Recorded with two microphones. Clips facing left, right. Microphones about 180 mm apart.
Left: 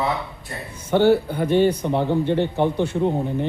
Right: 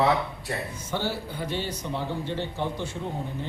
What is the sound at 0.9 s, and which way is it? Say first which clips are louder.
Speech: left 15 dB; 60° left (ahead or behind).